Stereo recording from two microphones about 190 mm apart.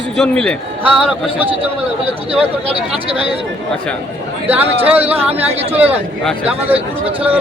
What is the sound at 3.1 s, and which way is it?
Speech, 30° right (ahead or behind).